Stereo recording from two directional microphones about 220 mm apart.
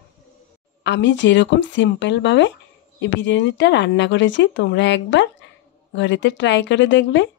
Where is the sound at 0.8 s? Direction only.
55° left (ahead or behind).